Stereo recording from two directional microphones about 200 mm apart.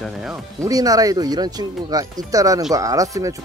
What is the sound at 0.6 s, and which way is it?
Speech, 20° right (ahead or behind).